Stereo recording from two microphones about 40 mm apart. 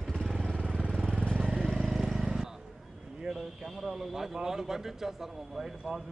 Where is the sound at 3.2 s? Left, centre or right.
Centre.